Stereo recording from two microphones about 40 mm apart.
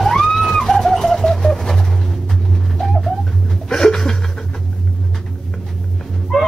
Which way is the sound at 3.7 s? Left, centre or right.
Centre.